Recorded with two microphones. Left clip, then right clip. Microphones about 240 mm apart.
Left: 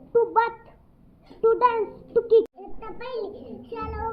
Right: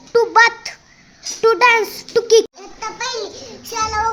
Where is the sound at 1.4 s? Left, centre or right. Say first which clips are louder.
Right 7 dB; right.